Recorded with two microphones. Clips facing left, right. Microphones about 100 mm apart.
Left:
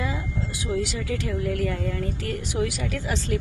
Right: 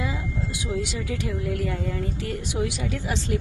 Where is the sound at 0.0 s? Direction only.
20° right (ahead or behind).